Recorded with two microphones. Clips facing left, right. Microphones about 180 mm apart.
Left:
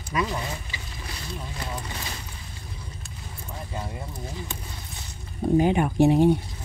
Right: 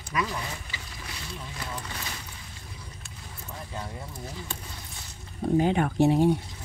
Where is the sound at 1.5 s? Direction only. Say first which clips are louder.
Left 1 dB; 25° left (ahead or behind).